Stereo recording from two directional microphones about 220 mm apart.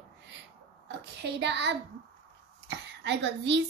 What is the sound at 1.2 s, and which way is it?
A woman's voice, 50° right (ahead or behind).